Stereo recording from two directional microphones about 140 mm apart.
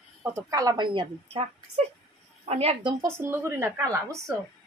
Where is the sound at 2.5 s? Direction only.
45° right (ahead or behind).